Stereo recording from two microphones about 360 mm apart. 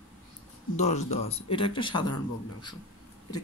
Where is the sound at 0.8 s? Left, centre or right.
Centre.